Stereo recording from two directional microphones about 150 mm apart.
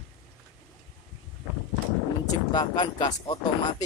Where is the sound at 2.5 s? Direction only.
30° left (ahead or behind).